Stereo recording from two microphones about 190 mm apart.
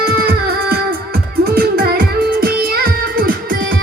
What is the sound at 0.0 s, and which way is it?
Music, 55° right (ahead or behind).